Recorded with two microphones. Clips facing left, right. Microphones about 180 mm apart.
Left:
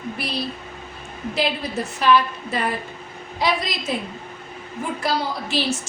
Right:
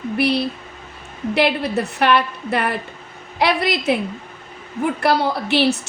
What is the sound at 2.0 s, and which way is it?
A woman's voice, 65° right (ahead or behind).